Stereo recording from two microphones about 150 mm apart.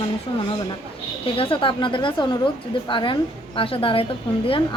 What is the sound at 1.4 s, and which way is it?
Speech, 35° left (ahead or behind).